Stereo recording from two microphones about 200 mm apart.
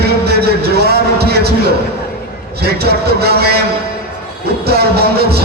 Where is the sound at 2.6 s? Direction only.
55° right (ahead or behind).